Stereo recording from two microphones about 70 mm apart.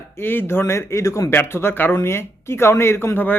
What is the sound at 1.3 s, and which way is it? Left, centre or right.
Speech, left.